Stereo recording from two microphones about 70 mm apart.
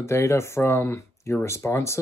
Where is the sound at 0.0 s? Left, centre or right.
Left.